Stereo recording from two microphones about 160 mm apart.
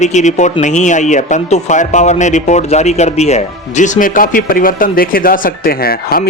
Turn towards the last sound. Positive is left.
turn(degrees=70)  # may be behind; listen again after turning